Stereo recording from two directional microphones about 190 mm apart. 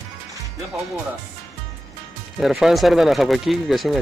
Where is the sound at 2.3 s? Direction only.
Centre (ahead or behind).